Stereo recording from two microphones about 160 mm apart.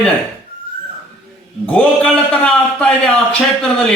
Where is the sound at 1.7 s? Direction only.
5° left (ahead or behind).